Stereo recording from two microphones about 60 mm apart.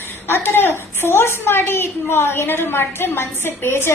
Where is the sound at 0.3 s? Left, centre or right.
Left.